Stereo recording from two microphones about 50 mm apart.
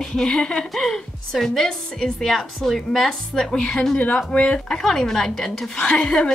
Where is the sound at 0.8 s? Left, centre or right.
Centre.